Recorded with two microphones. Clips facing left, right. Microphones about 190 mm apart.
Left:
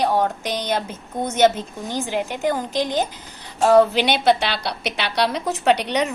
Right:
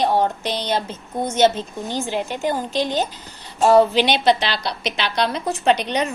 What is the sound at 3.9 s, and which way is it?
A woman's voice, 55° left (ahead or behind).